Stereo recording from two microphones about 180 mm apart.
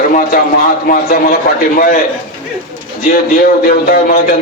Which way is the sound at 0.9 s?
55° left (ahead or behind).